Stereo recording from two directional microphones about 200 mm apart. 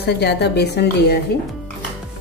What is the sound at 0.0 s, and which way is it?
A woman's voice, 55° left (ahead or behind).